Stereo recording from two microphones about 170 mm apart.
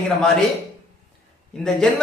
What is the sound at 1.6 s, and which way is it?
Speech, 5° left (ahead or behind).